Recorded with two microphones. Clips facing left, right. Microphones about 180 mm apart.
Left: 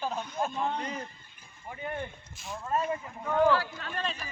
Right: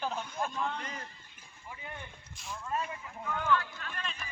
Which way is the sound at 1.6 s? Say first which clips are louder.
Left 9 dB; 55° left (ahead or behind).